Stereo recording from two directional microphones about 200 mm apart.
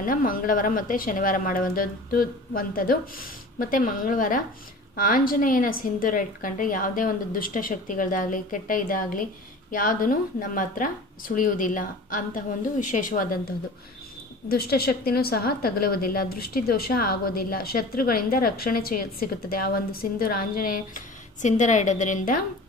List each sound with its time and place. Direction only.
0.0 s a woman's voice: 45° left (ahead or behind)
14.5 s a woman's voice: 50° left (ahead or behind)